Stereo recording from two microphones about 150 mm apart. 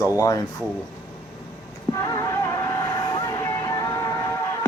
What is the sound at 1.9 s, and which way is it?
Music, 25° left (ahead or behind).